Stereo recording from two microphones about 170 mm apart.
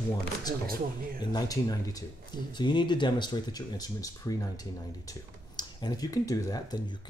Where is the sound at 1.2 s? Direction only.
25° left (ahead or behind).